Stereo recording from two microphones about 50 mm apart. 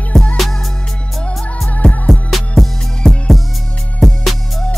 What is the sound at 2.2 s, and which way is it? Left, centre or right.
Music, centre.